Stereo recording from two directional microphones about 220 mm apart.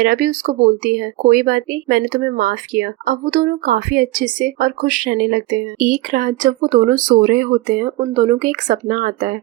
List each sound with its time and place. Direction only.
0.0 s speech: 40° right (ahead or behind)